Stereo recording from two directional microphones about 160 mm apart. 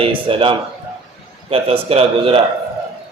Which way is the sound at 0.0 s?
35° right (ahead or behind).